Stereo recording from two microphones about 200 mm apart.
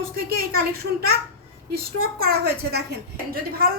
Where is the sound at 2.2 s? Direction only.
50° right (ahead or behind).